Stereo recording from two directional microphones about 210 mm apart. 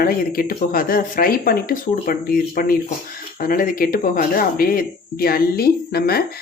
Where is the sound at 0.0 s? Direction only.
45° left (ahead or behind).